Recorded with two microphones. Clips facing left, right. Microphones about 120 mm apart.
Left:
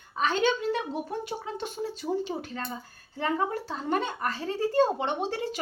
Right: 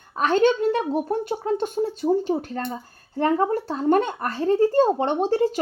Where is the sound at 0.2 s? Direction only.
55° right (ahead or behind).